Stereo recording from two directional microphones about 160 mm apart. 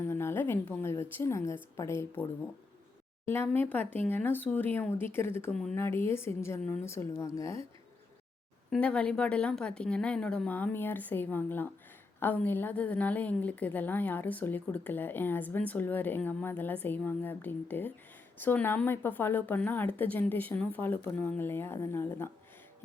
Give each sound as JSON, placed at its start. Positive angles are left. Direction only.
{"t": 0.0, "sound": "a woman's voice", "side_deg": 15}
{"t": 3.2, "sound": "a woman's voice", "side_deg": 15}
{"t": 8.7, "sound": "a woman's voice", "side_deg": 5}